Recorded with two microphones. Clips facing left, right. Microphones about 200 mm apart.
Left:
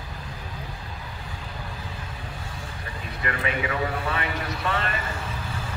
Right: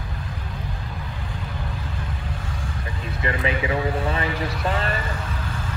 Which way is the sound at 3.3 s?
30° right (ahead or behind).